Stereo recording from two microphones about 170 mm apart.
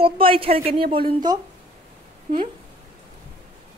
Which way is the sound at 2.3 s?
45° right (ahead or behind).